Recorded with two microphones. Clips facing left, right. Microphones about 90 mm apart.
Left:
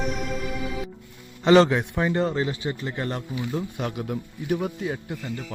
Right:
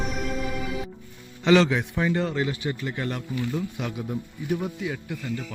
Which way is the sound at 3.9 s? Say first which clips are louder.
Left 1 dB; 65° left (ahead or behind).